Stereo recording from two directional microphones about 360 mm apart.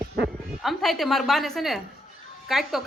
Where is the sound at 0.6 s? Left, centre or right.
Centre.